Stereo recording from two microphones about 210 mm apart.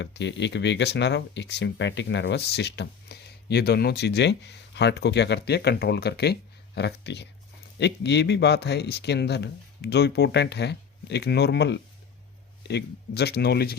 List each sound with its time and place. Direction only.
0.0 s speech: 55° left (ahead or behind)